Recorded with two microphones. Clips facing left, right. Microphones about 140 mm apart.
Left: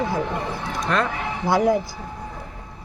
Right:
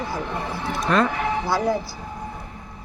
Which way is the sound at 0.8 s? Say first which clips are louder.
Right 3 dB; centre (ahead or behind).